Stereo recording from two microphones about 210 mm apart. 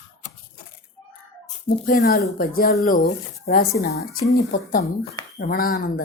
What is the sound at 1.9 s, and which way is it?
A woman's voice, 45° left (ahead or behind).